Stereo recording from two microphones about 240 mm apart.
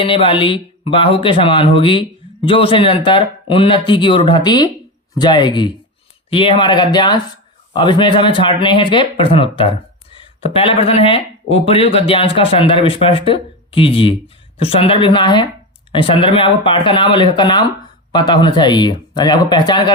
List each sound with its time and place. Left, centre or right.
0.0 s speech: left